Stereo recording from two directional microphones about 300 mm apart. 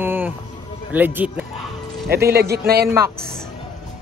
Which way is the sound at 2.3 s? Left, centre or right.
Right.